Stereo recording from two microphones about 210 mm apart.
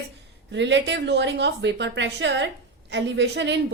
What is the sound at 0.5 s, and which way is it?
A woman's voice, 60° right (ahead or behind).